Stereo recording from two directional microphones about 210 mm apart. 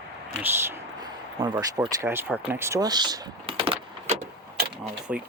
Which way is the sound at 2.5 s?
10° right (ahead or behind).